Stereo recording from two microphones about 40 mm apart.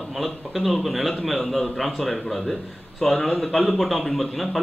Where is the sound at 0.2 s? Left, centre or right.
Centre.